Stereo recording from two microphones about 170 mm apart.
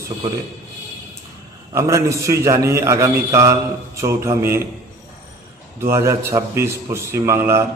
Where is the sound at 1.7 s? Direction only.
15° right (ahead or behind).